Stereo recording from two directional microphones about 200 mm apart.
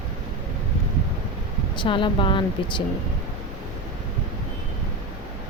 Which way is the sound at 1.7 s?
25° left (ahead or behind).